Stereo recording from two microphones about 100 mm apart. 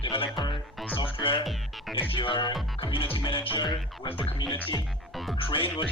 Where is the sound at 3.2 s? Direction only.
60° left (ahead or behind).